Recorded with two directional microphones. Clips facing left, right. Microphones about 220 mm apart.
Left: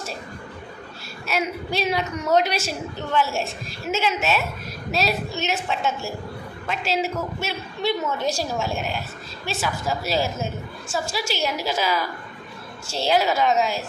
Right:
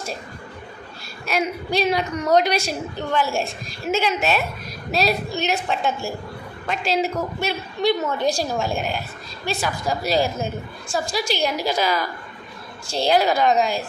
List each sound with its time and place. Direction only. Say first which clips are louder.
1.3 s a woman's voice: right 3 dB; 5° left (ahead or behind)
5.0 s a woman's voice: right 3 dB; 35° right (ahead or behind)
5.5 s a woman's voice: right 2 dB; centre (ahead or behind)
8.2 s a woman's voice: right 3 dB; 35° right (ahead or behind)
8.5 s a woman's voice: right 2 dB; centre (ahead or behind)